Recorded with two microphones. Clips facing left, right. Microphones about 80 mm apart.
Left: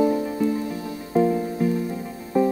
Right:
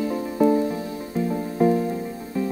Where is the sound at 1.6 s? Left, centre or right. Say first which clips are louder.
Right 6 dB; right.